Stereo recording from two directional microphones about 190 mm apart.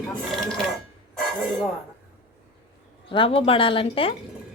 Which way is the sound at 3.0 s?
30° left (ahead or behind).